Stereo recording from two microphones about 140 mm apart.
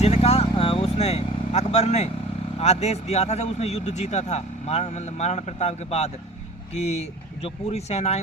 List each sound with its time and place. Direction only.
0.0 s speech: 50° left (ahead or behind)